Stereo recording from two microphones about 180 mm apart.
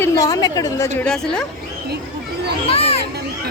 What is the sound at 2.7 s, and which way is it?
Children playing, 35° left (ahead or behind).